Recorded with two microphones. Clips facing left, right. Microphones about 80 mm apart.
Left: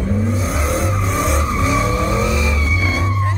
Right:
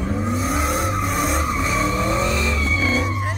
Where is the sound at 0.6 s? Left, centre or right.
Centre.